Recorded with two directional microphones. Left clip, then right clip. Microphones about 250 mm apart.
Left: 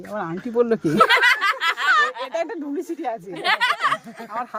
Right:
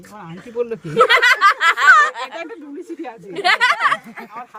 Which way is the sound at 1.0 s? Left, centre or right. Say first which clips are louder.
Right 7 dB; centre.